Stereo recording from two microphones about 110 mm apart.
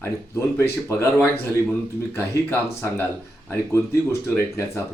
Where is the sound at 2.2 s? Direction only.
20° left (ahead or behind).